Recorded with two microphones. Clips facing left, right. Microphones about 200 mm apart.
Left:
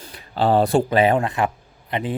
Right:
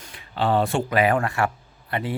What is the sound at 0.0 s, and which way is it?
Speech, 35° left (ahead or behind).